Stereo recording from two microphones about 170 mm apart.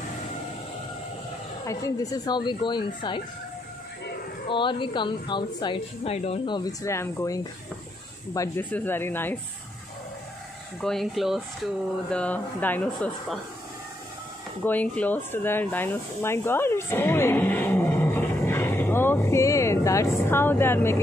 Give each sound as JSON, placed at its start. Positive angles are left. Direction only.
{"t": 1.7, "sound": "a woman's voice", "side_deg": 20}
{"t": 4.5, "sound": "a woman's voice", "side_deg": 30}
{"t": 10.8, "sound": "speech", "side_deg": 0}
{"t": 14.6, "sound": "speech", "side_deg": 10}